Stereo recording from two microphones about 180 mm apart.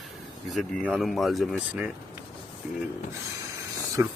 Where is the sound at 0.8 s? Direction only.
Centre (ahead or behind).